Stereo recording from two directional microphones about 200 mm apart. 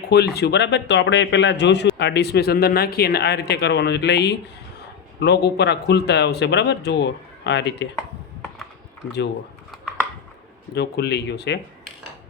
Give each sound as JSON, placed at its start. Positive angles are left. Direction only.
{"t": 0.1, "sound": "a man's voice", "side_deg": 55}
{"t": 10.8, "sound": "a man's voice", "side_deg": 55}